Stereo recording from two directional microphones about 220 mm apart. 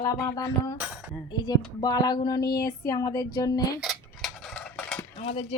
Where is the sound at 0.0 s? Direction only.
15° left (ahead or behind).